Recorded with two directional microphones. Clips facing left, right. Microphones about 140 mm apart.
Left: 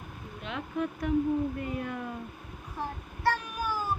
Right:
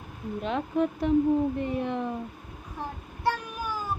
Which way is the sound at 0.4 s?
35° right (ahead or behind).